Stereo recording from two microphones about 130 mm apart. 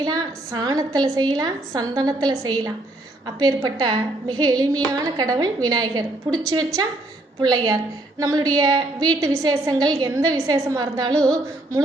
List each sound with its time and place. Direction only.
0.0 s a woman's voice: 30° right (ahead or behind)
7.4 s a woman's voice: 30° right (ahead or behind)